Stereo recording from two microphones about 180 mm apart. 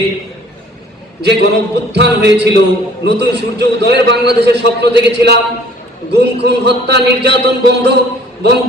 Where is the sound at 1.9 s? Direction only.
70° right (ahead or behind).